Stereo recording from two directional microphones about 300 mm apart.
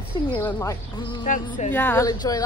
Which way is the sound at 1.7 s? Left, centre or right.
Centre.